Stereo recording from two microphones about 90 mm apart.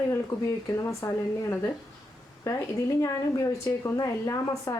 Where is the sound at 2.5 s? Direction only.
30° left (ahead or behind).